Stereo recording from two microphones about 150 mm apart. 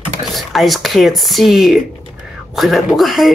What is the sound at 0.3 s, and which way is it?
Speech, centre (ahead or behind).